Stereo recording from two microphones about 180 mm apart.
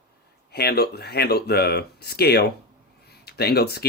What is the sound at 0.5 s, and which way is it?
Speech, 60° left (ahead or behind).